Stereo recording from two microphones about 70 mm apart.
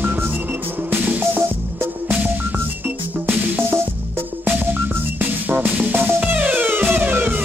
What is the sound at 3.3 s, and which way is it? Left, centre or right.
Music, right.